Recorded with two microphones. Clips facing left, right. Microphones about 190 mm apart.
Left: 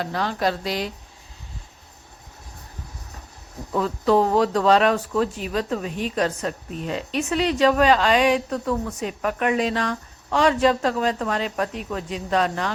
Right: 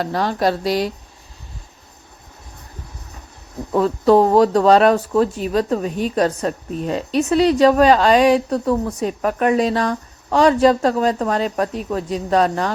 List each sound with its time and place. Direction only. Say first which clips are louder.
0.0 s speech: right 5 dB; 40° right (ahead or behind)
3.7 s speech: right 6 dB; 35° right (ahead or behind)